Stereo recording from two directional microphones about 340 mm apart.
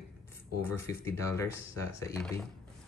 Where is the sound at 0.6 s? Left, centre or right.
Centre.